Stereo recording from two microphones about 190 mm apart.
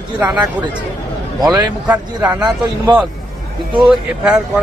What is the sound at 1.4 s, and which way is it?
Speech, 20° right (ahead or behind).